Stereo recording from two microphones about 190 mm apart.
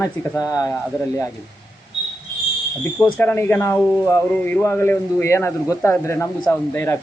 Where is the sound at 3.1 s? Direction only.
10° left (ahead or behind).